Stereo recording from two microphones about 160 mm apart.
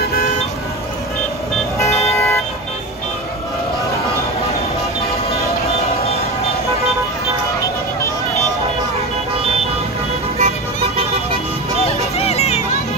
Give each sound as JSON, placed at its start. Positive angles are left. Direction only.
{"t": 1.9, "sound": "vehicle", "side_deg": 40}
{"t": 10.4, "sound": "vehicle", "side_deg": -40}
{"t": 11.8, "sound": "a sound", "side_deg": 40}